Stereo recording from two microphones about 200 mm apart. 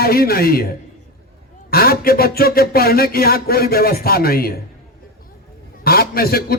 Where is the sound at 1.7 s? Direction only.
50° left (ahead or behind).